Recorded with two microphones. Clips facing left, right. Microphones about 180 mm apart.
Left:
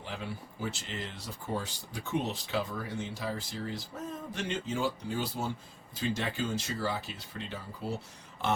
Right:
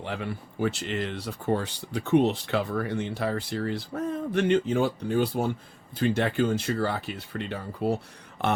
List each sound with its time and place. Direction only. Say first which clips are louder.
0.0 s speech: right 7 dB; 65° right (ahead or behind)